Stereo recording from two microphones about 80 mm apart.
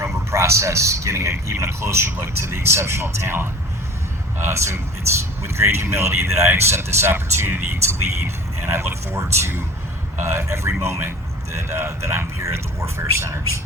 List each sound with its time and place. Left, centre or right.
0.0 s a man's voice: right